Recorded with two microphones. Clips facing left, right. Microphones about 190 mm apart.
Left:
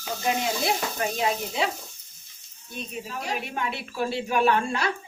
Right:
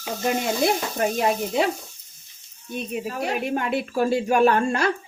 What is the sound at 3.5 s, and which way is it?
A woman's voice, 50° right (ahead or behind).